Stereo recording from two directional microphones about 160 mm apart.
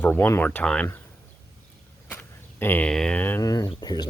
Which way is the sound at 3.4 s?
25° left (ahead or behind).